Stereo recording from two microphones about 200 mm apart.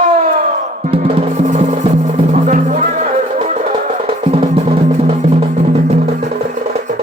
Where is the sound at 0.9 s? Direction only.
25° right (ahead or behind).